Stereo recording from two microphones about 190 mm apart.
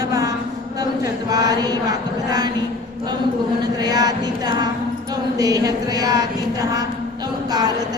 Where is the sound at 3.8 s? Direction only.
20° right (ahead or behind).